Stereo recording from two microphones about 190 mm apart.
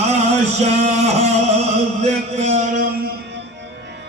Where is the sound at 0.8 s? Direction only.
35° right (ahead or behind).